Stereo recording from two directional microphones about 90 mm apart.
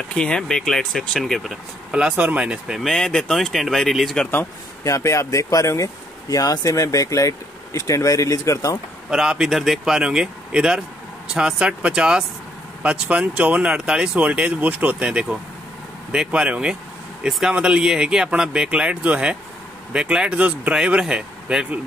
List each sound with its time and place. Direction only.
0.1 s speech: 10° left (ahead or behind)
1.9 s speech: 10° right (ahead or behind)
2.8 s speech: 5° left (ahead or behind)
4.3 s speech: 30° left (ahead or behind)
9.1 s speech: 5° right (ahead or behind)